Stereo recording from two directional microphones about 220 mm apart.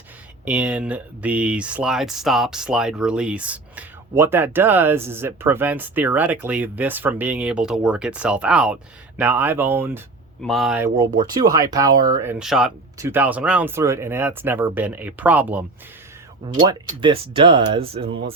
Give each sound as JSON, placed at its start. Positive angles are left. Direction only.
{"t": 0.4, "sound": "speech", "side_deg": -5}
{"t": 16.6, "sound": "speech", "side_deg": -20}